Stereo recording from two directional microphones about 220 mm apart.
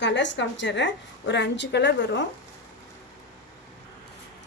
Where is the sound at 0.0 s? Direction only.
55° left (ahead or behind).